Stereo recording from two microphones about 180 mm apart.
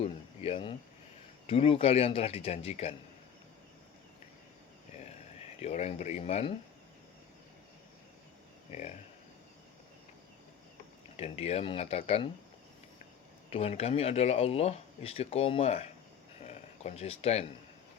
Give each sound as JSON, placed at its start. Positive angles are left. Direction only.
{"t": 0.0, "sound": "a sound", "side_deg": 30}
{"t": 1.5, "sound": "speech", "side_deg": 30}
{"t": 5.5, "sound": "speech", "side_deg": 35}
{"t": 8.7, "sound": "speech", "side_deg": 40}
{"t": 11.2, "sound": "speech", "side_deg": 35}
{"t": 13.5, "sound": "speech", "side_deg": 35}
{"t": 16.5, "sound": "a sound", "side_deg": 35}